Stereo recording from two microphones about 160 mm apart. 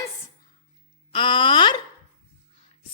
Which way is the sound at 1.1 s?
30° left (ahead or behind).